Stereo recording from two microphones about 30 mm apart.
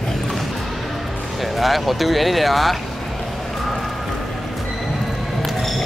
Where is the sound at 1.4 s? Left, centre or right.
Centre.